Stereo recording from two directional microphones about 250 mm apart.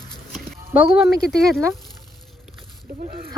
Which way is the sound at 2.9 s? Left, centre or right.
Right.